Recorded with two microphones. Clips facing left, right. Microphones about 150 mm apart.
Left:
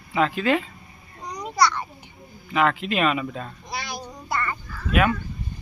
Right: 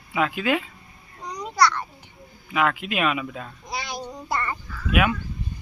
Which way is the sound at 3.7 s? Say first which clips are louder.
Right 3 dB; 15° right (ahead or behind).